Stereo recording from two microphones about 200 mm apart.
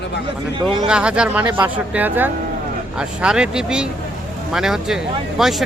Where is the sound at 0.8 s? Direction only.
5° right (ahead or behind).